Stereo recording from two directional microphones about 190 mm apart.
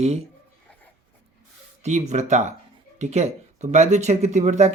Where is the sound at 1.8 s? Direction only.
40° right (ahead or behind).